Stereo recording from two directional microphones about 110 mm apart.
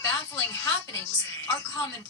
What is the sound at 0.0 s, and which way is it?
A woman's voice, 30° left (ahead or behind).